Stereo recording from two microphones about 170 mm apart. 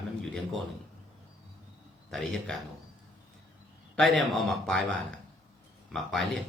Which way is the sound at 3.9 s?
Centre (ahead or behind).